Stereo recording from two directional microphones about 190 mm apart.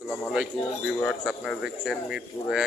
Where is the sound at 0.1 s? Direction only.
Centre (ahead or behind).